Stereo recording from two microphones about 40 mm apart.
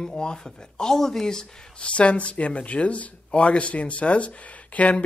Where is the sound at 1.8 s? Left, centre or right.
Left.